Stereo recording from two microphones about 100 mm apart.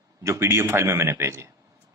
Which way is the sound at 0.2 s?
25° right (ahead or behind).